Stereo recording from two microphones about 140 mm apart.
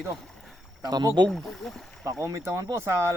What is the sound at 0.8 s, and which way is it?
Speech, 30° right (ahead or behind).